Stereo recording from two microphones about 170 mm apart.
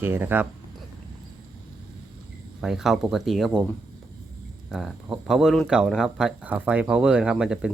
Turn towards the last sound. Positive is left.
turn(degrees=-5)  # may be behind; listen again after turning